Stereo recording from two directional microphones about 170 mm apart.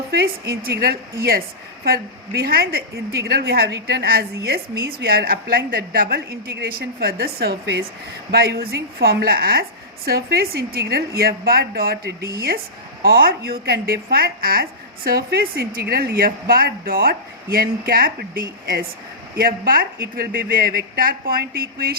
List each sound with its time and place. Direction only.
0.1 s a woman's voice: 70° right (ahead or behind)
8.3 s a woman's voice: 65° right (ahead or behind)